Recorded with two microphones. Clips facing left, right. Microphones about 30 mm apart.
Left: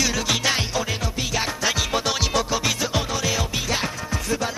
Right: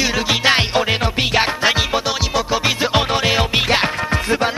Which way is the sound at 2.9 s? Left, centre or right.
Right.